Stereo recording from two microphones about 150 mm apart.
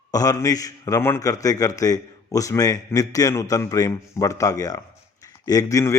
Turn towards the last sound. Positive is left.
turn(degrees=20)  # may be behind; listen again after turning